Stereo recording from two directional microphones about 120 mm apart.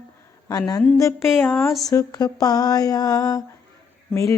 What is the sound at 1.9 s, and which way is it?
Mantra, 30° left (ahead or behind).